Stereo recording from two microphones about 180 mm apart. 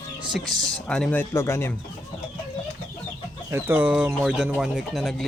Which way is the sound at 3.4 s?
15° right (ahead or behind).